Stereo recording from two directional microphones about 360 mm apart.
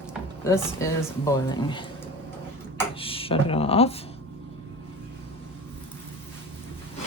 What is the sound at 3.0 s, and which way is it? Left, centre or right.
Speech, centre.